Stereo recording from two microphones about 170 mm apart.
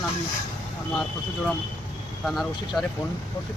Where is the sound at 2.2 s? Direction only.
Centre (ahead or behind).